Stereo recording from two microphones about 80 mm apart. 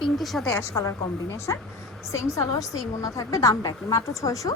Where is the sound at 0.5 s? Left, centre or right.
Left.